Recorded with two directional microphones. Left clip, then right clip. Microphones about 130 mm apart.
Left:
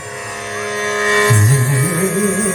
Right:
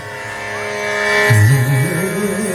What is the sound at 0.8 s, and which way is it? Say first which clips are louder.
Music: even; 40° right (ahead or behind).